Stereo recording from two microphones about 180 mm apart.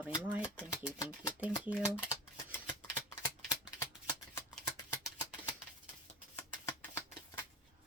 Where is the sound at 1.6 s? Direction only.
5° right (ahead or behind).